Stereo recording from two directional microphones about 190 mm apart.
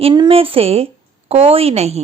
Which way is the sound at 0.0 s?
25° right (ahead or behind).